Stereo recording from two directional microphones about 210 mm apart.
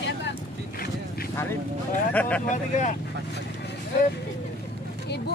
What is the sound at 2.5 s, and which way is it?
Speech, 35° left (ahead or behind).